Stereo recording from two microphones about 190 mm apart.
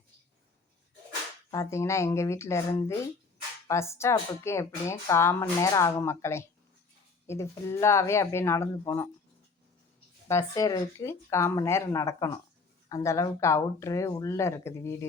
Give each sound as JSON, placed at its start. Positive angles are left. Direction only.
{"t": 1.5, "sound": "speech", "side_deg": 15}
{"t": 10.2, "sound": "speech", "side_deg": 15}